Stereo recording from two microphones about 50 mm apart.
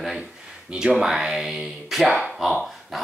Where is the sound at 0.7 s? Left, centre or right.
Centre.